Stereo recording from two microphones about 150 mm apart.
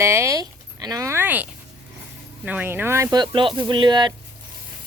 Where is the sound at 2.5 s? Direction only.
10° right (ahead or behind); by 4.1 s 30° right (ahead or behind).